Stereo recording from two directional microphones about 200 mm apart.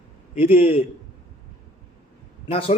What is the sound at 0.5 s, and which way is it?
Speech, 30° left (ahead or behind).